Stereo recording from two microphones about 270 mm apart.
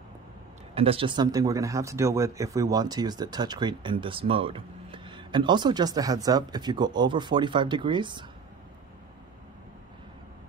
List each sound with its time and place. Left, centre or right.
0.7 s speech: right